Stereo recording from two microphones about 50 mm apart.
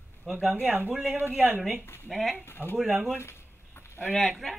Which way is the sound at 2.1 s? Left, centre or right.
Centre.